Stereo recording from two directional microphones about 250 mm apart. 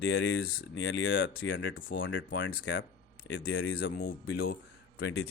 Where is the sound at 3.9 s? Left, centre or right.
Left.